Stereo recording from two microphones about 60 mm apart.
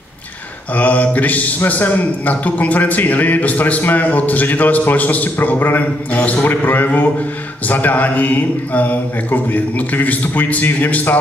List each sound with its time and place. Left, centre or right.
0.7 s a man's voice: left